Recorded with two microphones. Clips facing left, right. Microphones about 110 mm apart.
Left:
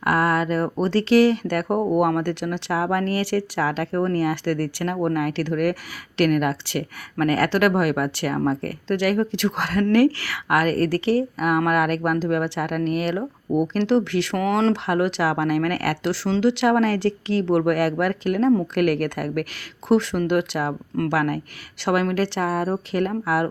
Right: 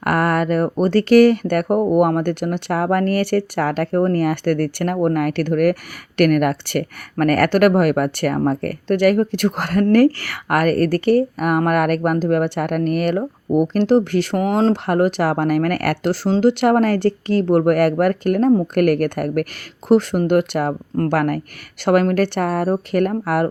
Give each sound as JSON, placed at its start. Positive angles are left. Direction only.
{"t": 0.0, "sound": "speech", "side_deg": -60}
{"t": 1.6, "sound": "speech", "side_deg": -10}
{"t": 2.0, "sound": "speech", "side_deg": -50}